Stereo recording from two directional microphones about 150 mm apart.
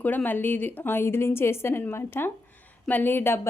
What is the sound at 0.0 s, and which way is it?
A woman's voice, 10° left (ahead or behind).